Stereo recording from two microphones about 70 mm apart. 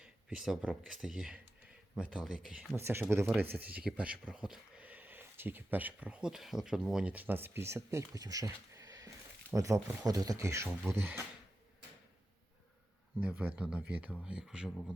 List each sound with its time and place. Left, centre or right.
0.0 s speech: centre
2.7 s speech: right; by 4.8 s centre
4.8 s speech: right
7.1 s speech: right
8.2 s speech: right
10.8 s speech: right
13.1 s speech: right